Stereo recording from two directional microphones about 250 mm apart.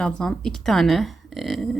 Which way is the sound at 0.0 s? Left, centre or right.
Centre.